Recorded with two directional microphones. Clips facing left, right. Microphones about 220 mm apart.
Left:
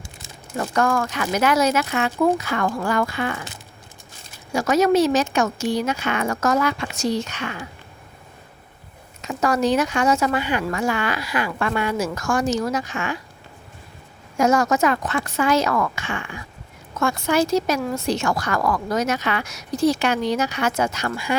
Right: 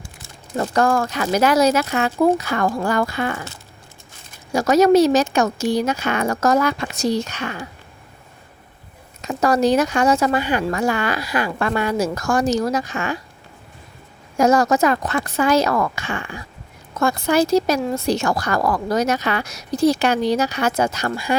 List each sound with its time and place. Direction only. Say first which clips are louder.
0.6 s speech: right 3 dB; 35° right (ahead or behind)
4.5 s speech: right 4 dB; 40° right (ahead or behind)
9.2 s speech: right 3 dB; 35° right (ahead or behind)
14.3 s speech: right 3 dB; 35° right (ahead or behind)